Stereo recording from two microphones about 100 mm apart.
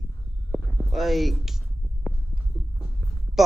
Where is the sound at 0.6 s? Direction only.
15° left (ahead or behind).